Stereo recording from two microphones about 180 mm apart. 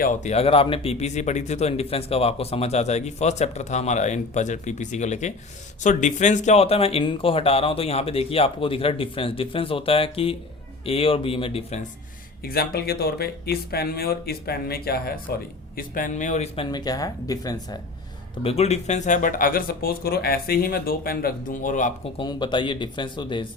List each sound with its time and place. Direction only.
0.0 s speech: 45° left (ahead or behind)
12.4 s speech: 55° left (ahead or behind); by 16.6 s 40° left (ahead or behind)
16.6 s speech: 20° left (ahead or behind)
18.4 s speech: 35° left (ahead or behind)
22.2 s speech: 25° left (ahead or behind)